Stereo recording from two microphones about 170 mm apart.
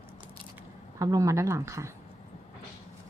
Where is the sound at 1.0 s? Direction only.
20° right (ahead or behind).